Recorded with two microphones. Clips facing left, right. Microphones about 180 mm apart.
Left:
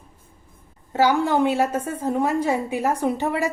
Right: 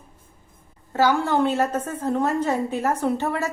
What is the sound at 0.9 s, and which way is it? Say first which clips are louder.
A woman's voice: left 1 dB; 15° left (ahead or behind).